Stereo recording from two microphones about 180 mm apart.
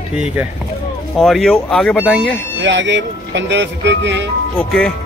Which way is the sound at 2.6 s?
90° right.